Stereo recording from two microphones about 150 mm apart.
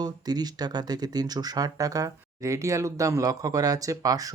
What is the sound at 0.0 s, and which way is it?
Speech, 25° right (ahead or behind).